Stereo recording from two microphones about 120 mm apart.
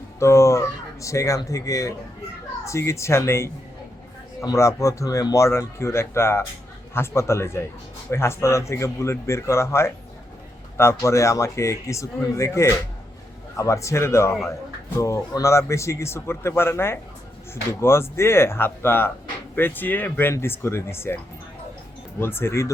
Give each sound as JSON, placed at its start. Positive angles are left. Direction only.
{"t": 0.2, "sound": "speech", "side_deg": 25}
{"t": 22.2, "sound": "speech", "side_deg": 20}